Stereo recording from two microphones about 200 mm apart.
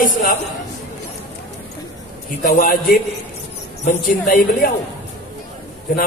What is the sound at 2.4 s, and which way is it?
A woman's voice, 45° left (ahead or behind).